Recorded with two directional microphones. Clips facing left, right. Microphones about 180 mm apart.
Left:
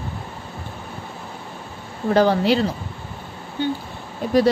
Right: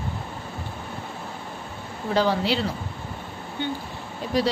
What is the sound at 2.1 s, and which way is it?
Speech, 50° left (ahead or behind).